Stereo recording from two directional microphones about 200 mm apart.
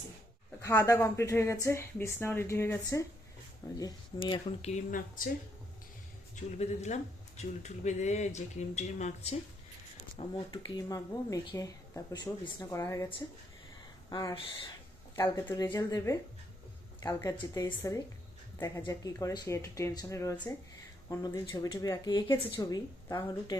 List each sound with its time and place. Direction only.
0.6 s speech: 15° left (ahead or behind)
4.3 s speech: 35° left (ahead or behind)
6.6 s speech: 35° left (ahead or behind)
10.2 s speech: 30° left (ahead or behind)
10.5 s speech: 20° left (ahead or behind)
14.1 s speech: 20° left (ahead or behind)